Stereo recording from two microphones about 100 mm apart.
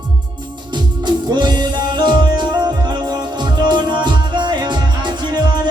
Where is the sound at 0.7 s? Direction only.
45° right (ahead or behind).